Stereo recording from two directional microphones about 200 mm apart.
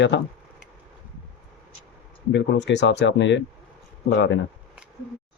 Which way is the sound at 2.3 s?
60° left (ahead or behind).